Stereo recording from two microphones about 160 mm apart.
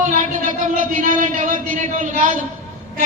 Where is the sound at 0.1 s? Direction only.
55° right (ahead or behind).